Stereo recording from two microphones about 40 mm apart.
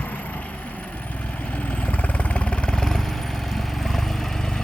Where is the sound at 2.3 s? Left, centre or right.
Left.